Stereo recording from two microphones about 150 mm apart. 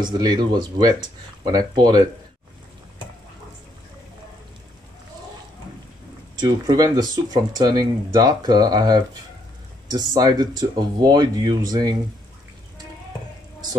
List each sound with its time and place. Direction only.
0.0 s speech: 30° right (ahead or behind)
6.3 s speech: 25° right (ahead or behind)